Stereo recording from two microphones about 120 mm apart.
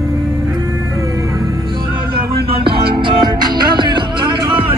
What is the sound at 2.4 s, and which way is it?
Music, 45° right (ahead or behind).